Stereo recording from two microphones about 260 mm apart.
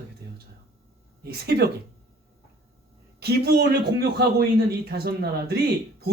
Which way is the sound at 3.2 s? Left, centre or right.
Right.